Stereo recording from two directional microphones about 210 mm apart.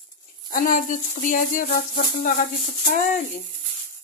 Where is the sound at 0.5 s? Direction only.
40° left (ahead or behind).